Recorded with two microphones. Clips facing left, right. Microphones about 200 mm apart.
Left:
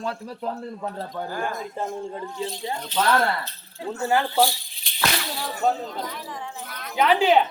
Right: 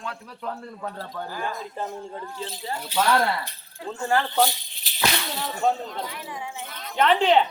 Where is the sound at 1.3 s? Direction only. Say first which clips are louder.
Left 2 dB; 45° left (ahead or behind).